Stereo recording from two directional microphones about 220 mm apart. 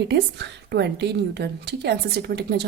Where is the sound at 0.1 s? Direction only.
50° right (ahead or behind).